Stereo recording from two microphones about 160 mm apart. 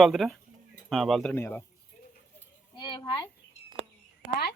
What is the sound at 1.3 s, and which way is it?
Speech, 15° left (ahead or behind).